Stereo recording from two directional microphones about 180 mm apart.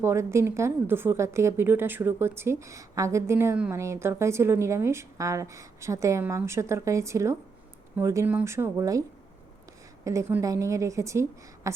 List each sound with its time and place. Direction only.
0.0 s a woman's voice: 15° right (ahead or behind)